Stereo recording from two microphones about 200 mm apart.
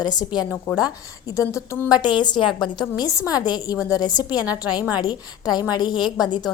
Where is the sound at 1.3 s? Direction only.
15° left (ahead or behind).